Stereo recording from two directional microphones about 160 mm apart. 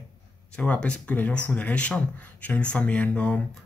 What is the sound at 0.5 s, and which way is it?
Speech, 5° left (ahead or behind).